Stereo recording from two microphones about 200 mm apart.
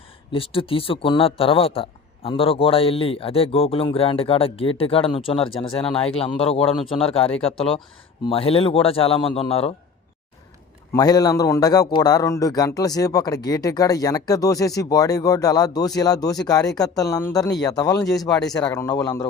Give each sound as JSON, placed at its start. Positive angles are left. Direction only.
{"t": 0.3, "sound": "speech", "side_deg": 25}
{"t": 10.9, "sound": "a man's voice", "side_deg": 20}